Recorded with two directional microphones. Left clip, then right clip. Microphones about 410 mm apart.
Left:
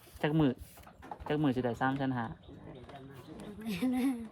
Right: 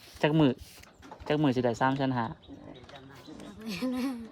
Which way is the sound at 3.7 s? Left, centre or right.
Centre.